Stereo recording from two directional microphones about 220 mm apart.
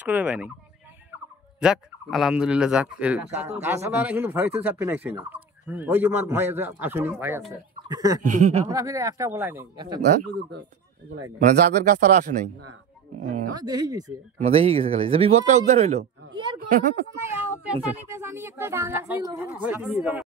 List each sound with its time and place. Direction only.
0.0 s speech: 5° right (ahead or behind)
1.6 s speech: centre (ahead or behind)
8.2 s a man's voice: 30° right (ahead or behind)
8.6 s speech: 15° right (ahead or behind)
11.4 s a man's voice: 35° right (ahead or behind)
13.6 s speech: 15° right (ahead or behind); by 17.0 s 35° right (ahead or behind)
17.1 s speech: 10° right (ahead or behind)